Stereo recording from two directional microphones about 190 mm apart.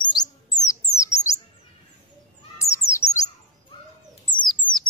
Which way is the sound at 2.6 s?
15° left (ahead or behind).